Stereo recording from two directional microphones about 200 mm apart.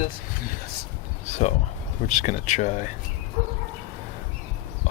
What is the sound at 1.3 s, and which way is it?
Speech, 35° left (ahead or behind).